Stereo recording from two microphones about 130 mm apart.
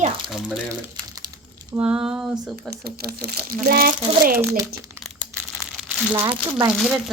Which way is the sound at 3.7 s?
90° right.